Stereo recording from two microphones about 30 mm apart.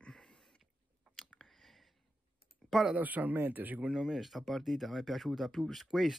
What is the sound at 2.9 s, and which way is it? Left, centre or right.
Speech, right.